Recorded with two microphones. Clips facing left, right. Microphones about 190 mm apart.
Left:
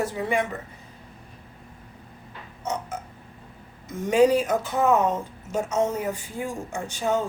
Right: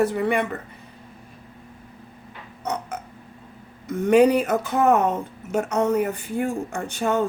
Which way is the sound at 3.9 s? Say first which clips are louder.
Right 3 dB; 60° right (ahead or behind).